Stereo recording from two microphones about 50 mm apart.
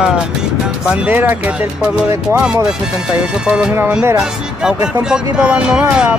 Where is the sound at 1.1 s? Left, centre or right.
Right.